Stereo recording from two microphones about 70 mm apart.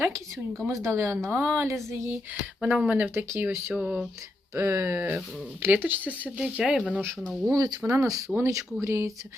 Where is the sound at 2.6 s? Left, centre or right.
Centre.